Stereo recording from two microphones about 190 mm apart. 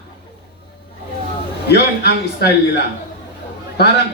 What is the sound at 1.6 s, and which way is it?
A man's voice, 60° left (ahead or behind).